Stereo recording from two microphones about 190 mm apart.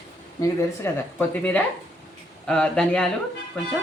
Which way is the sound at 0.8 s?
5° left (ahead or behind).